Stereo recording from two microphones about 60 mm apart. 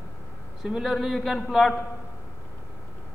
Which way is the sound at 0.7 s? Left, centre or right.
Centre.